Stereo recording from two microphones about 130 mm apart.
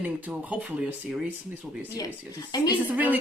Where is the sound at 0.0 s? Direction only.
10° right (ahead or behind).